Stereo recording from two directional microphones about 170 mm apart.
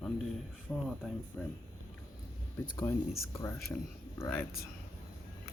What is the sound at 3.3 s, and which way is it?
Speech, 15° left (ahead or behind).